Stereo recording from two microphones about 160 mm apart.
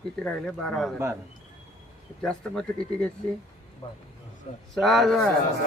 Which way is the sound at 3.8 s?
40° left (ahead or behind).